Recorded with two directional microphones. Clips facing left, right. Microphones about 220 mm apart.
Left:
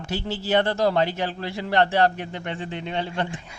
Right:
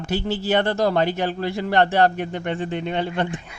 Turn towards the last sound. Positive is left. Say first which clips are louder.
# right 4 dB
turn(degrees=-55)  # may be behind; listen again after turning